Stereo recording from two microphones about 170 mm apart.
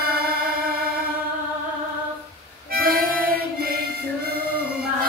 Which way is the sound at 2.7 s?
60° right (ahead or behind).